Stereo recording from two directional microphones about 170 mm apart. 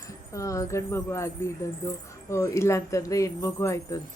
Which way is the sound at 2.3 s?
15° left (ahead or behind).